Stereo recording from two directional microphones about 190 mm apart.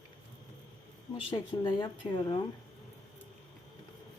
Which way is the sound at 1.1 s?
25° left (ahead or behind).